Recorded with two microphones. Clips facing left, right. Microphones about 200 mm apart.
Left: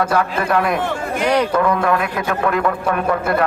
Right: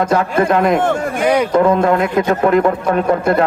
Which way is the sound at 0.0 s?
20° right (ahead or behind).